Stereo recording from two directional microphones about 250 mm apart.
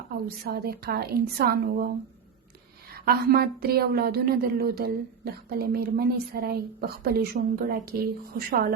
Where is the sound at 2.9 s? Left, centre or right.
Right.